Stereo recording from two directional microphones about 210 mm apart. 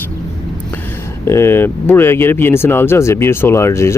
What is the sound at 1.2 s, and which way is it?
Speech, 10° left (ahead or behind).